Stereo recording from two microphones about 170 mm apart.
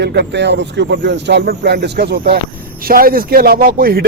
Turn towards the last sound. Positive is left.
turn(degrees=-60)  # may be behind; listen again after turning